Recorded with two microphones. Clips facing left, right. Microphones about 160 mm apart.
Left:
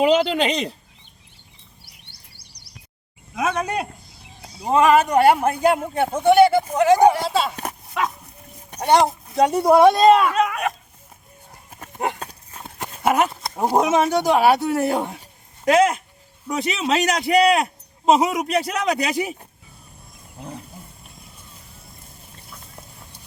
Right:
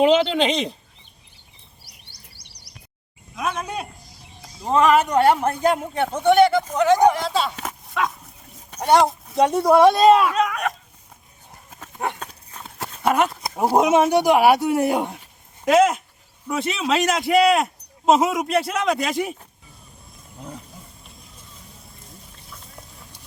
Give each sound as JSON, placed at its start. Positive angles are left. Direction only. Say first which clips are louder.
{"t": 0.0, "sound": "speech", "louder": "right 1 dB", "side_deg": 5}
{"t": 1.8, "sound": "a sound", "louder": "even", "side_deg": 60}
{"t": 3.3, "sound": "speech", "louder": "left 4 dB", "side_deg": 75}
{"t": 4.6, "sound": "speech", "louder": "left 1 dB", "side_deg": 10}
{"t": 8.9, "sound": "speech", "louder": "even", "side_deg": 0}
{"t": 12.3, "sound": "horse", "louder": "left 1 dB", "side_deg": 15}
{"t": 13.1, "sound": "speech", "louder": "left 1 dB", "side_deg": 0}
{"t": 15.6, "sound": "speech", "louder": "even", "side_deg": -5}